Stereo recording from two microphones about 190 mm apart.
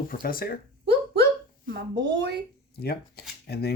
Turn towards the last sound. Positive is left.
turn(degrees=55)  # may be behind; listen again after turning